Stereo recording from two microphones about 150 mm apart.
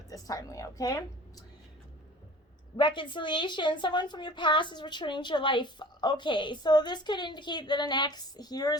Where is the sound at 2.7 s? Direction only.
30° left (ahead or behind).